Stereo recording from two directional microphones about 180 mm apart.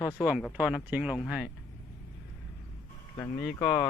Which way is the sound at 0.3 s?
5° right (ahead or behind).